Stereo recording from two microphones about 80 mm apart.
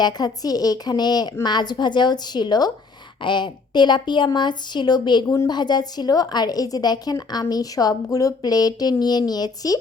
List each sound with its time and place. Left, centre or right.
0.0 s a woman's voice: left
3.2 s a woman's voice: left